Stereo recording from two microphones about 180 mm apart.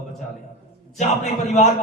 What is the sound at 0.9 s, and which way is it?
Speech, 40° left (ahead or behind).